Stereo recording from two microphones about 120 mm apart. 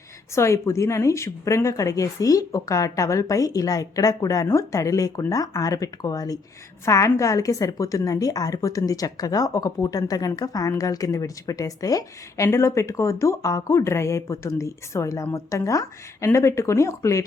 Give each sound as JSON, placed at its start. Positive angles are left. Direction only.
{"t": 0.3, "sound": "a woman's voice", "side_deg": 25}